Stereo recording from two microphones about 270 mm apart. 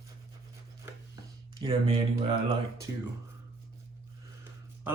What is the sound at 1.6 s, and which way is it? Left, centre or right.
Speech, centre.